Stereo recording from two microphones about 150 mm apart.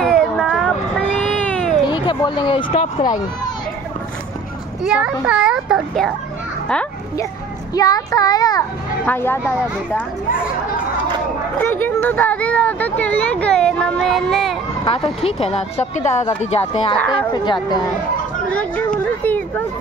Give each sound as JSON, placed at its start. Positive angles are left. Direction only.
{"t": 0.0, "sound": "a sound", "side_deg": 0}
{"t": 1.1, "sound": "cat", "side_deg": 10}
{"t": 2.0, "sound": "speech", "side_deg": 30}
{"t": 4.8, "sound": "a child's voice", "side_deg": -5}
{"t": 7.7, "sound": "a child's voice", "side_deg": 25}
{"t": 9.0, "sound": "speech", "side_deg": 15}
{"t": 11.5, "sound": "speech", "side_deg": 15}
{"t": 14.9, "sound": "speech", "side_deg": 40}
{"t": 17.3, "sound": "a child's voice", "side_deg": 30}
{"t": 18.5, "sound": "a sound", "side_deg": 10}
{"t": 19.2, "sound": "speech", "side_deg": 10}